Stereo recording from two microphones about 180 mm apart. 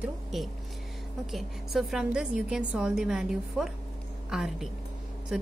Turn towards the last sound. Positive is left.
turn(degrees=-5)  # may be behind; listen again after turning